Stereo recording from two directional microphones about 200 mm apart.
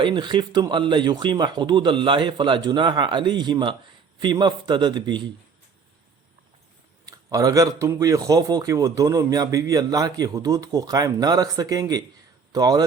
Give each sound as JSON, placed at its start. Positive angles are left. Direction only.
{"t": 0.0, "sound": "speech", "side_deg": -25}
{"t": 7.0, "sound": "a man's voice", "side_deg": -15}